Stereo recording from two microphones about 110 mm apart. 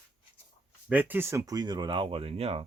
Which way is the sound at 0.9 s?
15° right (ahead or behind).